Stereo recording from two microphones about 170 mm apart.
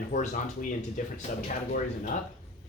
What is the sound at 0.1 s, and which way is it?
Speech, 50° left (ahead or behind).